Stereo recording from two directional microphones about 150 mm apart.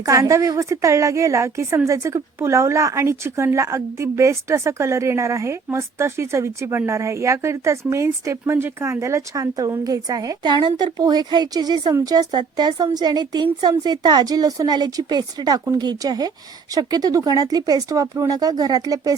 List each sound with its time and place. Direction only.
0.0 s a woman's voice: 20° right (ahead or behind)